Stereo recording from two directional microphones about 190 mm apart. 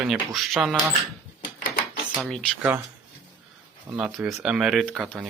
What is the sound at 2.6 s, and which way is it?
Speech, 10° right (ahead or behind).